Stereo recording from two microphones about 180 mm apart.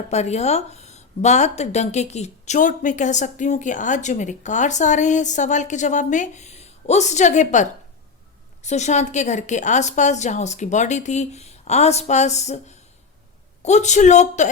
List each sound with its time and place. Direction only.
0.1 s a woman's voice: 40° left (ahead or behind)